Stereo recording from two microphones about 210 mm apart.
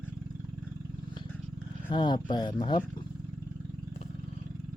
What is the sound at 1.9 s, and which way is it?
Speech, 20° left (ahead or behind).